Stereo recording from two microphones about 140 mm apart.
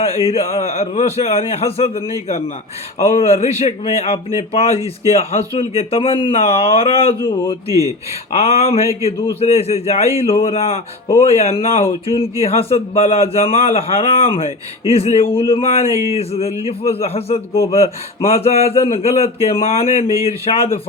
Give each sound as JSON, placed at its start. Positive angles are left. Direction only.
{"t": 0.0, "sound": "speech", "side_deg": 45}
{"t": 3.2, "sound": "speech", "side_deg": 45}
{"t": 7.7, "sound": "speech", "side_deg": -25}
{"t": 8.3, "sound": "speech", "side_deg": 50}